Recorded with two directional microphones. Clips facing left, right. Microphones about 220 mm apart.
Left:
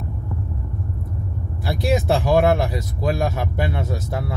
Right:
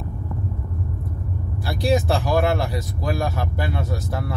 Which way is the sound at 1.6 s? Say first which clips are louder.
Even; 20° left (ahead or behind).